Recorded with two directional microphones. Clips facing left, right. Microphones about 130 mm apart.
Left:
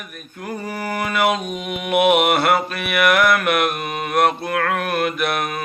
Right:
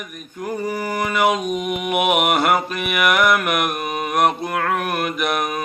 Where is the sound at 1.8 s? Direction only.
Centre (ahead or behind).